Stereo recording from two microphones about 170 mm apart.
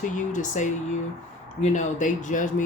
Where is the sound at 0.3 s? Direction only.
45° left (ahead or behind).